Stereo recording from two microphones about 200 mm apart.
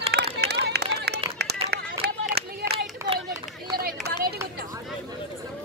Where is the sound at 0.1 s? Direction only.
55° right (ahead or behind).